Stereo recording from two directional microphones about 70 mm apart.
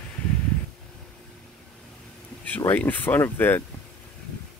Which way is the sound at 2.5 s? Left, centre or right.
Left.